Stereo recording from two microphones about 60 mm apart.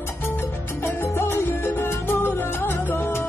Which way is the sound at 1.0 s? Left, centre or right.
Left.